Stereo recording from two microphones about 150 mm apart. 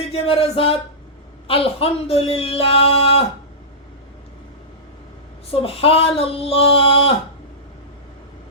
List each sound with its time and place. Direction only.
0.0 s speech: 40° left (ahead or behind)
5.5 s speech: 40° left (ahead or behind)